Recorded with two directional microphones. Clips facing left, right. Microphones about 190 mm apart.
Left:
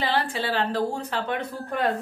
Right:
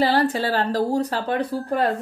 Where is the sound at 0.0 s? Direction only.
40° right (ahead or behind).